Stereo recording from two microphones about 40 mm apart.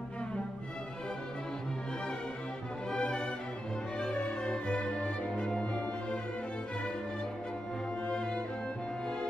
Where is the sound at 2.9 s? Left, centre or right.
Left.